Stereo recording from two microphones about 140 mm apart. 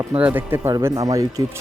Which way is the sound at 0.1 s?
10° right (ahead or behind).